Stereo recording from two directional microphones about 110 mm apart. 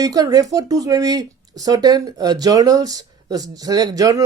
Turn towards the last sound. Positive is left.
turn(degrees=-35)  # may be behind; listen again after turning